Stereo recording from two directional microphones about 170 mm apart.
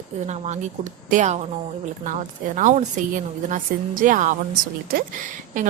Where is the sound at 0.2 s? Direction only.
45° right (ahead or behind).